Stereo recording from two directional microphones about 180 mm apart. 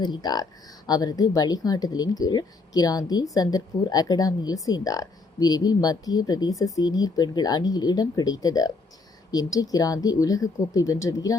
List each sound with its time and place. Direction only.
0.0 s speech: 25° left (ahead or behind)